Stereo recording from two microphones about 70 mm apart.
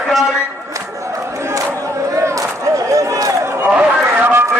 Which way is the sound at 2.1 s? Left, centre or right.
Right.